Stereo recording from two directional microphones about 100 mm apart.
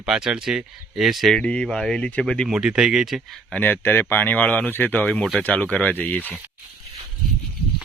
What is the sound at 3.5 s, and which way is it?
Speech, 20° left (ahead or behind).